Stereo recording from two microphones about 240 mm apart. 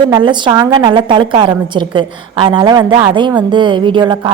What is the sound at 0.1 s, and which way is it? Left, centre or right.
A woman's voice, centre.